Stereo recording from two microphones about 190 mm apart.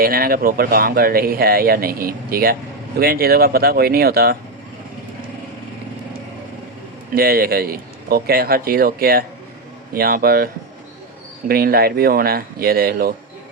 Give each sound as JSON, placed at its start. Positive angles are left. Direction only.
{"t": 0.0, "sound": "speech", "side_deg": -50}
{"t": 7.1, "sound": "speech", "side_deg": -50}